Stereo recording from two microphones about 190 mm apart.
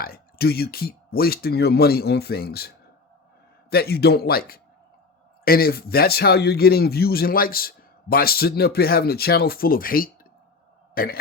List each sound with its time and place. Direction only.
0.0 s a man's voice: 55° left (ahead or behind)